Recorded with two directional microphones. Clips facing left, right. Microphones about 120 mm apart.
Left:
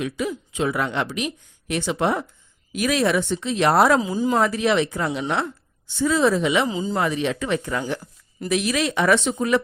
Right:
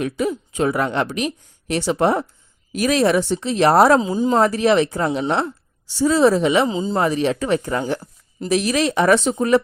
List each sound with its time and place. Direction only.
0.0 s a woman's voice: 45° right (ahead or behind); by 4.4 s 30° right (ahead or behind)
4.4 s a woman's voice: 40° right (ahead or behind)
7.0 s a woman's voice: 35° right (ahead or behind)